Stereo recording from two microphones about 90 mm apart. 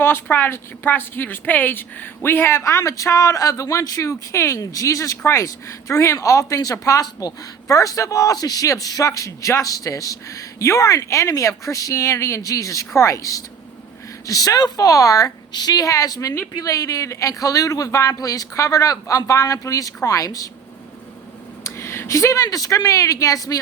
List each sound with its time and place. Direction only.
0.0 s a woman's voice: 25° left (ahead or behind); by 20.5 s 40° left (ahead or behind)
21.6 s speech: 30° left (ahead or behind)